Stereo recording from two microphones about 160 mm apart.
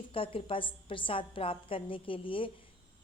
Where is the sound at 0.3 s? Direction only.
35° left (ahead or behind).